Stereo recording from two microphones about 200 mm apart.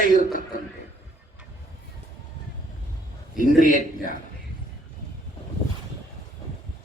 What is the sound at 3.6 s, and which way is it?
Speech, 40° left (ahead or behind).